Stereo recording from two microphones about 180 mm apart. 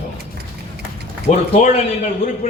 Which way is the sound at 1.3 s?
35° left (ahead or behind).